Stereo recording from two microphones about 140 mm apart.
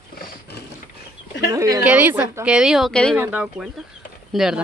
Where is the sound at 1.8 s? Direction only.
10° right (ahead or behind); by 3.1 s 5° left (ahead or behind).